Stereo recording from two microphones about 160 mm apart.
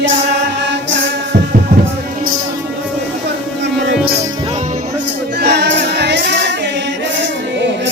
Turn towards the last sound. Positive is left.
turn(degrees=-90)